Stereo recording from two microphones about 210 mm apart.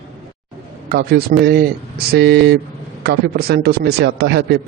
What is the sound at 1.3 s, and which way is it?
A man's voice, 45° right (ahead or behind).